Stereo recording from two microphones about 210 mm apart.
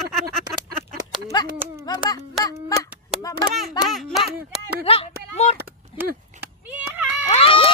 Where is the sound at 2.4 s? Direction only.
15° left (ahead or behind).